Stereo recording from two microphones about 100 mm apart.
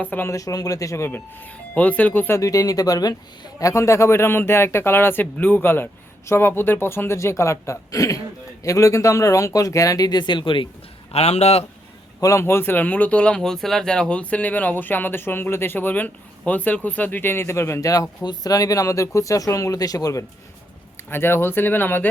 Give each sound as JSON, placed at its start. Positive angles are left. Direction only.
{"t": 0.0, "sound": "speech", "side_deg": 20}
{"t": 0.3, "sound": "speech", "side_deg": 35}
{"t": 2.4, "sound": "speech", "side_deg": 35}
{"t": 11.1, "sound": "a man's voice", "side_deg": 90}
{"t": 12.2, "sound": "speech", "side_deg": 30}
{"t": 21.1, "sound": "speech", "side_deg": 20}